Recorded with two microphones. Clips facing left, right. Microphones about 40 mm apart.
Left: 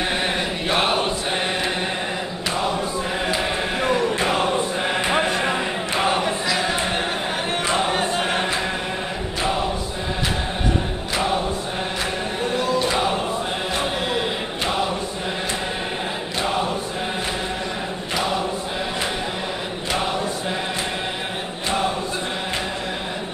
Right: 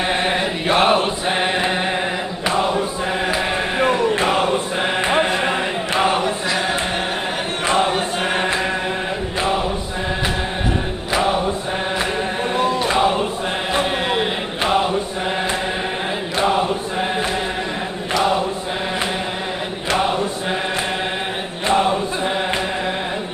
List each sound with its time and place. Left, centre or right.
0.7 s choir: centre
3.3 s a sound: right
4.2 s choir: centre
4.7 s a sound: right
7.9 s choir: centre
12.5 s choir: right